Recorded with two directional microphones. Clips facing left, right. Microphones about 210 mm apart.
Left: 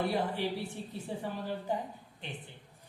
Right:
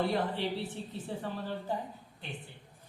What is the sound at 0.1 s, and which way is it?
A woman's voice, 15° left (ahead or behind).